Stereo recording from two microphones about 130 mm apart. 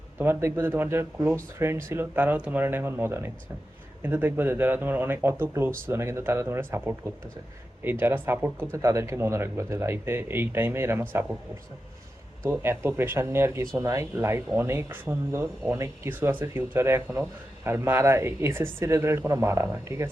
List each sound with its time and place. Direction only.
0.2 s speech: 20° right (ahead or behind)
12.5 s speech: 15° right (ahead or behind)